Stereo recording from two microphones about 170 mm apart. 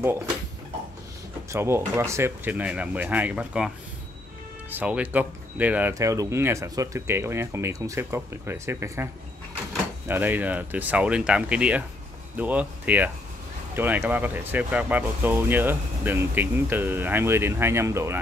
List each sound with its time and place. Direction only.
1.5 s speech: 15° right (ahead or behind)